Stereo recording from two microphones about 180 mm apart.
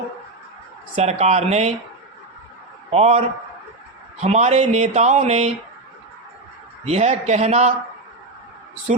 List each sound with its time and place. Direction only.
0.9 s speech: 35° right (ahead or behind)
2.9 s speech: 35° right (ahead or behind)
6.8 s speech: 35° right (ahead or behind)